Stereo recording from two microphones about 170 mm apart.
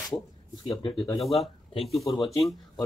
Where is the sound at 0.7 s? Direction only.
30° left (ahead or behind).